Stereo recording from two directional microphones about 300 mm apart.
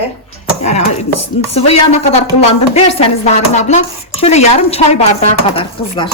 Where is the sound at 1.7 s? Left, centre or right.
Left.